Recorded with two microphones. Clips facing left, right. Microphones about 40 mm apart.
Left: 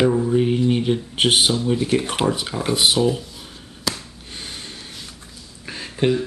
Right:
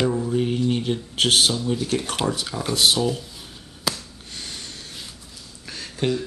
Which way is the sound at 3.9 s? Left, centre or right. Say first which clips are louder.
Left 2 dB; left.